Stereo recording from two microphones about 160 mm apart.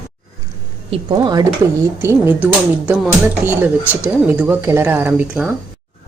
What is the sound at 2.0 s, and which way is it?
Speech, 10° right (ahead or behind).